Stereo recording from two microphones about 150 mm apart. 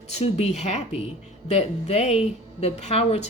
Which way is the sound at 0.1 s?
45° left (ahead or behind).